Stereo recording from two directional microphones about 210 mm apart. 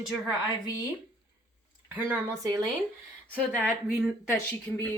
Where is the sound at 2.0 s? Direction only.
10° right (ahead or behind).